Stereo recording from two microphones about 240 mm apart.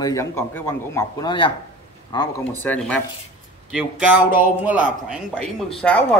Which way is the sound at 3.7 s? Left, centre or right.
Centre.